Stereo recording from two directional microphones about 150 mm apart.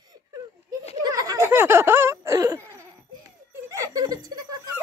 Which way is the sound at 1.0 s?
25° right (ahead or behind).